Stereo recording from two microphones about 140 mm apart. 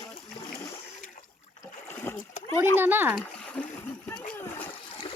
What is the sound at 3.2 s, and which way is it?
Splash, 10° left (ahead or behind).